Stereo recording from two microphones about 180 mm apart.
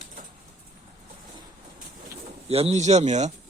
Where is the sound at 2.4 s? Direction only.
35° right (ahead or behind).